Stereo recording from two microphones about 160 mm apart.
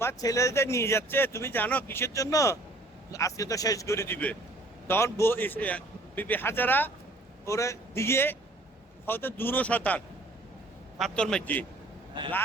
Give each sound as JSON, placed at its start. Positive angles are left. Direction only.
{"t": 0.0, "sound": "a man's voice", "side_deg": 20}
{"t": 12.1, "sound": "speech", "side_deg": -30}